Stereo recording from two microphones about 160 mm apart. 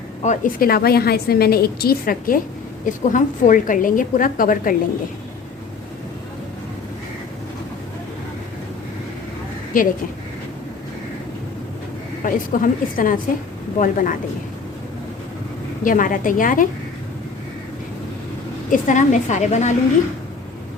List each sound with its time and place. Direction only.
0.2 s a woman's voice: 55° left (ahead or behind)
2.8 s a woman's voice: 55° left (ahead or behind)
9.7 s a woman's voice: 55° left (ahead or behind)
12.2 s a woman's voice: 60° left (ahead or behind)
15.8 s a woman's voice: 55° left (ahead or behind)
18.7 s a woman's voice: 55° left (ahead or behind)